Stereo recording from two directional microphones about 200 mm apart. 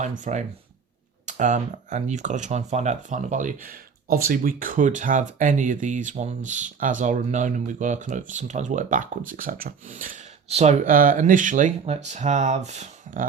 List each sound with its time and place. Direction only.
0.0 s speech: 40° right (ahead or behind)